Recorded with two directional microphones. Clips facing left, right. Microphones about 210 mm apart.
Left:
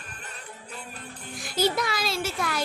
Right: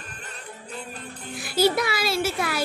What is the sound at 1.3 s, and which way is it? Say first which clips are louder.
A child's voice: right 4 dB; 5° right (ahead or behind).